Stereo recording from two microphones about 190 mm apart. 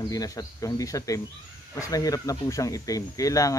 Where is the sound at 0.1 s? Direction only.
20° left (ahead or behind).